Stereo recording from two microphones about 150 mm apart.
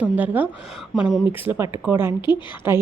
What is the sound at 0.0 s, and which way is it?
Speech, 10° right (ahead or behind).